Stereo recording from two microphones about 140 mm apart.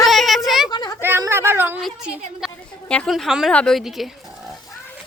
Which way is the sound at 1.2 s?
20° right (ahead or behind).